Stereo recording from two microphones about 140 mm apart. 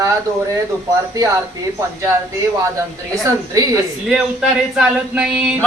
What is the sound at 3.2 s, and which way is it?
Speech, 25° right (ahead or behind).